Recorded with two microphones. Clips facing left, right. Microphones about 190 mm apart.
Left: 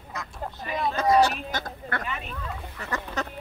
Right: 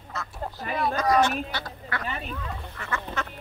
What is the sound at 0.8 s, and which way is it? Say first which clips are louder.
Speech: left 2 dB; 25° left (ahead or behind).